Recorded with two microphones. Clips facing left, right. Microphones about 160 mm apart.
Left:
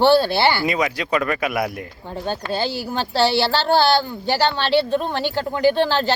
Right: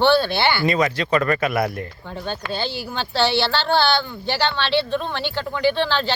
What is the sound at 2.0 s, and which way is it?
Speech, 35° left (ahead or behind).